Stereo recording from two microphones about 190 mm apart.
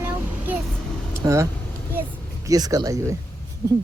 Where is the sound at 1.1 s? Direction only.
15° right (ahead or behind).